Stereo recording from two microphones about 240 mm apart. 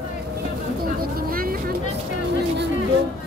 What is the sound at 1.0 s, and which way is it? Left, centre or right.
Vehicle, right.